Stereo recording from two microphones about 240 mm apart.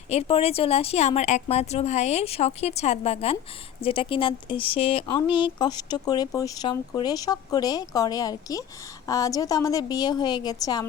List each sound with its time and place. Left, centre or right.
0.1 s a woman's voice: left